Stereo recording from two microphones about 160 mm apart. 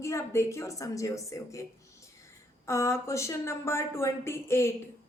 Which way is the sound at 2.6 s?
15° left (ahead or behind).